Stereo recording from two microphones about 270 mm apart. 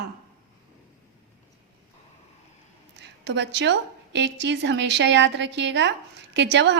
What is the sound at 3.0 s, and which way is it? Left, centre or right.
A woman's voice, right.